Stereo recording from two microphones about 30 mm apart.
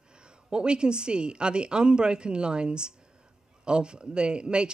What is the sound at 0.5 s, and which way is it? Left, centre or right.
A man's voice, right.